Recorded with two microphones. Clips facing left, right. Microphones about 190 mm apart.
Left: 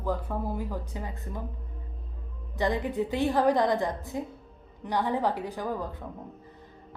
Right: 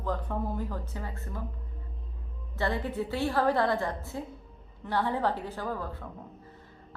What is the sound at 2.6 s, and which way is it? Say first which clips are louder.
A woman's voice: left 3 dB; 15° left (ahead or behind).